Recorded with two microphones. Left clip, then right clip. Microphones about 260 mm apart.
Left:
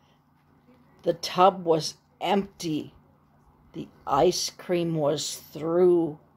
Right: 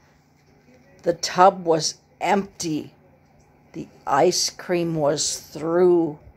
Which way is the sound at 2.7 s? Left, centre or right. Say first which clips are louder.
Right 3 dB; right.